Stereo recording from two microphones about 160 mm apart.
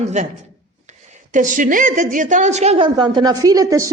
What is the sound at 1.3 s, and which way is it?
A woman's voice, 55° right (ahead or behind).